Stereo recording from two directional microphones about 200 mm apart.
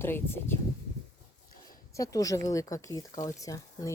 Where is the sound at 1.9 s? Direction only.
15° left (ahead or behind).